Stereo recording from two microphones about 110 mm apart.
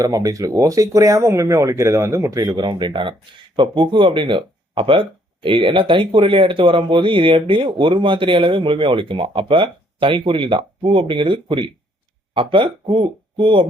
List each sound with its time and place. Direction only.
0.0 s speech: 30° right (ahead or behind)
2.6 s speech: 45° right (ahead or behind)